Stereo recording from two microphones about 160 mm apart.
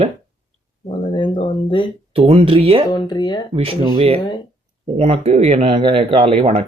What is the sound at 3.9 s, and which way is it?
Speech, 35° right (ahead or behind).